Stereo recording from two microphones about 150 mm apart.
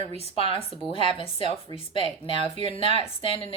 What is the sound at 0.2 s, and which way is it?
Speech, 40° left (ahead or behind).